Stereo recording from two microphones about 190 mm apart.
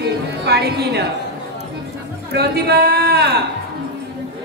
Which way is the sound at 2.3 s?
60° right (ahead or behind).